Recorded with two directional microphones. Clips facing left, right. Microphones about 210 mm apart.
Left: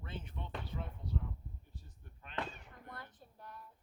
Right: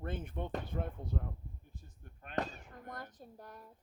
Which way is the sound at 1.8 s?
50° right (ahead or behind).